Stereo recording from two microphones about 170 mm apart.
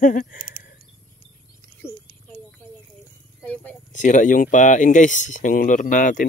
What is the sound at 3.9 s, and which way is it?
Speech, 45° left (ahead or behind).